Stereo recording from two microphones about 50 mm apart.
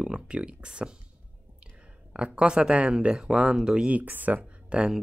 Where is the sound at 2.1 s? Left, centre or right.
Right.